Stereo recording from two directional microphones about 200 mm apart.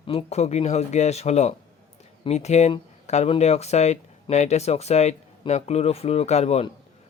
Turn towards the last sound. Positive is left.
turn(degrees=30)  # may be behind; listen again after turning